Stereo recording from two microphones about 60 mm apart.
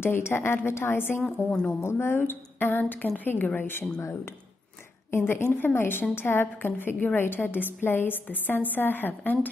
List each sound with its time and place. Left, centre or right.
0.0 s a woman's voice: left